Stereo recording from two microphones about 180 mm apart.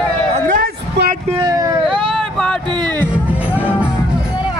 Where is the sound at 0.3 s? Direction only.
45° right (ahead or behind).